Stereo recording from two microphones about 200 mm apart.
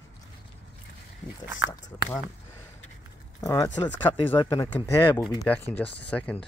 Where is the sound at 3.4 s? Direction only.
15° left (ahead or behind).